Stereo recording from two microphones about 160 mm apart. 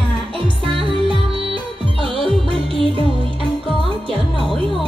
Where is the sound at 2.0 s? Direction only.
35° right (ahead or behind).